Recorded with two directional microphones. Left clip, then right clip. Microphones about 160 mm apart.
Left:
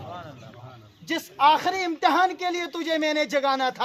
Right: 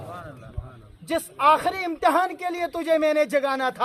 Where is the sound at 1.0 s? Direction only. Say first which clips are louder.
Even; centre (ahead or behind).